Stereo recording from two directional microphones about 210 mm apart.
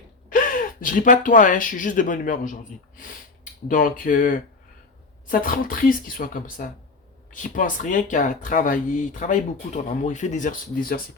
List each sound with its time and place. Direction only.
0.3 s speech: 40° left (ahead or behind)